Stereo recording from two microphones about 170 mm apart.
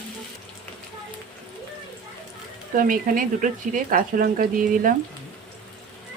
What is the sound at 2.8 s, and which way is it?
Speech, 55° right (ahead or behind).